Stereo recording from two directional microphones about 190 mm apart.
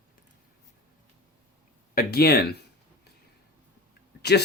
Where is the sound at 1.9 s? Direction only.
55° left (ahead or behind).